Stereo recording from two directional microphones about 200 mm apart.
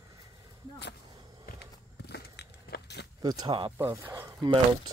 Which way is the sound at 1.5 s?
55° left (ahead or behind).